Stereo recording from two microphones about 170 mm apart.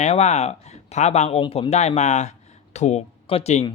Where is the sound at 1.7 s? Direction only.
40° left (ahead or behind).